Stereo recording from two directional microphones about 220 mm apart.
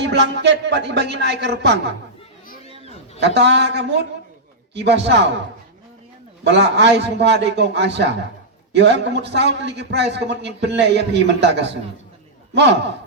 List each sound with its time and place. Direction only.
0.0 s a man's voice: 50° right (ahead or behind)
3.2 s a man's voice: 50° right (ahead or behind)
6.4 s a man's voice: 50° right (ahead or behind)